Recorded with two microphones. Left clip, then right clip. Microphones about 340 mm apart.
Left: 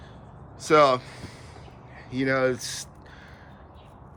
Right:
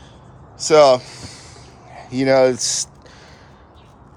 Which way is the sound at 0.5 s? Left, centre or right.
Centre.